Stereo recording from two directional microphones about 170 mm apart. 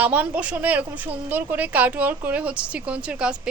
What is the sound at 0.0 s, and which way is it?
A woman's voice, 10° right (ahead or behind).